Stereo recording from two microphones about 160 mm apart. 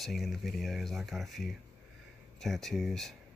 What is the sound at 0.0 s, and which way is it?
Speech, centre (ahead or behind).